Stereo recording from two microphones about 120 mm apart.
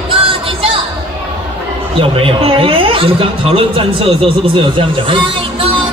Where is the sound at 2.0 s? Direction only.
50° right (ahead or behind).